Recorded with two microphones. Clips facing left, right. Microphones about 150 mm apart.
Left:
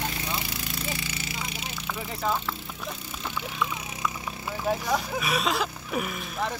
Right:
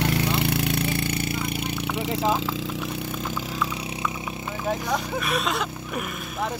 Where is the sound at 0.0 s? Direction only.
70° right (ahead or behind); by 3.4 s 45° right (ahead or behind).